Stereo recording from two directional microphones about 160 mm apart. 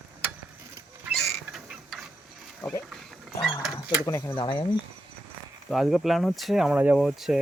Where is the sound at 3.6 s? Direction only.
5° right (ahead or behind).